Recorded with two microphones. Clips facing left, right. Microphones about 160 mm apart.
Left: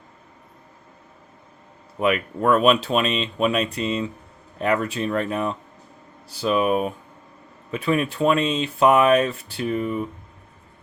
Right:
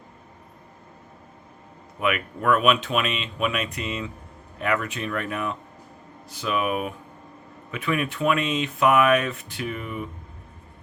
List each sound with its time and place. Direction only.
2.0 s speech: 30° left (ahead or behind)